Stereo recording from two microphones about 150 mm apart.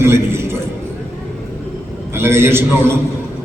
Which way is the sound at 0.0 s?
15° right (ahead or behind).